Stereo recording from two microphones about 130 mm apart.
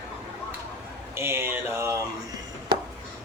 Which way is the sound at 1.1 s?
20° right (ahead or behind).